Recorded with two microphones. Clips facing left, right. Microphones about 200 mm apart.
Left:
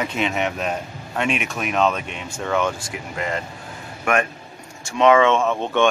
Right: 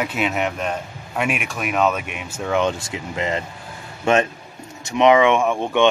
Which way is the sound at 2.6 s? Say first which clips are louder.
Right 2 dB; 20° right (ahead or behind).